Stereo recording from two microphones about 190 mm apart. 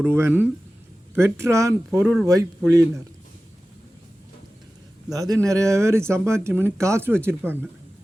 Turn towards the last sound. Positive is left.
turn(degrees=-10)  # may be behind; listen again after turning